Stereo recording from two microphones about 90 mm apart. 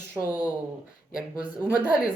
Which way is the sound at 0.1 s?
20° right (ahead or behind).